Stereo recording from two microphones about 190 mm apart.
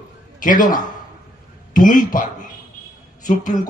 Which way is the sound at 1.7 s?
45° left (ahead or behind).